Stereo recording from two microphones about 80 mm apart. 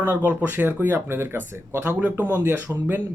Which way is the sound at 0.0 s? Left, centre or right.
Right.